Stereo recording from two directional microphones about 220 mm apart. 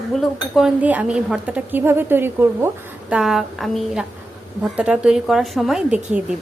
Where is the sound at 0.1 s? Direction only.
Centre (ahead or behind).